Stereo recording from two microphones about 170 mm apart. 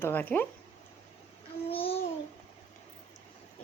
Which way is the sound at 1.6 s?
35° left (ahead or behind).